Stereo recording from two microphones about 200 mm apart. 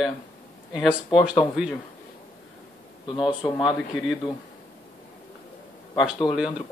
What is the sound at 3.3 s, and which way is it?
Speech, 25° left (ahead or behind).